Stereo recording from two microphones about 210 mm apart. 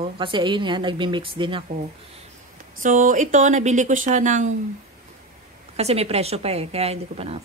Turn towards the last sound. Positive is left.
turn(degrees=-30)  # may be behind; listen again after turning